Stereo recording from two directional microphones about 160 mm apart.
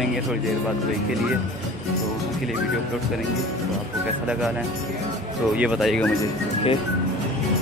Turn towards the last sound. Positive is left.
turn(degrees=0)  # may be behind; listen again after turning